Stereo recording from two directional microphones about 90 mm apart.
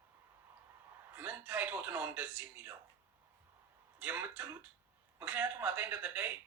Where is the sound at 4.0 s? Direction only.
20° right (ahead or behind).